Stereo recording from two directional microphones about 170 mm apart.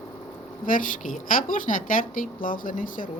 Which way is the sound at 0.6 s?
50° left (ahead or behind).